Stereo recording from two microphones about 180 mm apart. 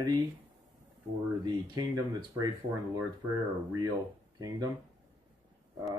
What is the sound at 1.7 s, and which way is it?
Speech, 20° right (ahead or behind).